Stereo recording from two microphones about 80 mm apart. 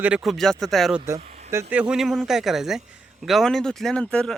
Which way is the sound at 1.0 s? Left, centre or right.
Right.